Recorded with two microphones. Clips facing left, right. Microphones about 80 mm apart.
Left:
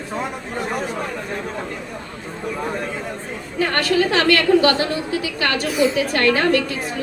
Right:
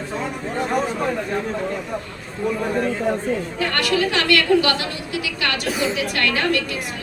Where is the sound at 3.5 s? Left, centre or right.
Left.